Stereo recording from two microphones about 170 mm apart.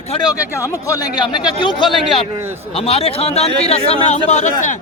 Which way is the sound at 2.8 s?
35° left (ahead or behind).